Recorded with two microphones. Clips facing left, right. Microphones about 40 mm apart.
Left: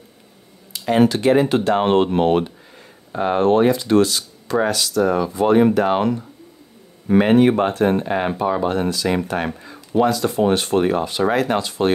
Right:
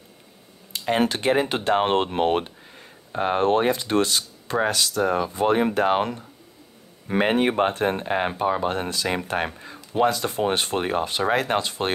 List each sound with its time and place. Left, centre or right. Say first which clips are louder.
0.7 s speech: left 6 dB; right
3.1 s speech: left 3 dB; right
3.3 s speech: left 5 dB; right
7.2 s speech: left 6 dB; right
8.6 s speech: left 5 dB; right